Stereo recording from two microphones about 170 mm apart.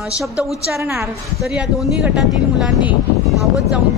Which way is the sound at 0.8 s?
15° right (ahead or behind).